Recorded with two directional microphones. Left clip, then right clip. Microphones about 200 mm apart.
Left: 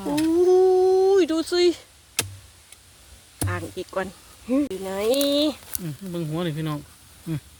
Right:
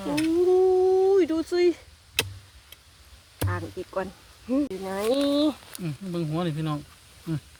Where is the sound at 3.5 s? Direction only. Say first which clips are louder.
Left 4 dB; 15° left (ahead or behind); by 5.6 s centre (ahead or behind).